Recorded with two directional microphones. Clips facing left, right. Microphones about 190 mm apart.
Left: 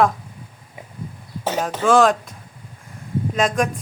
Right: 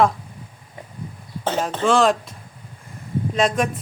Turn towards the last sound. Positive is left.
turn(degrees=0)  # may be behind; listen again after turning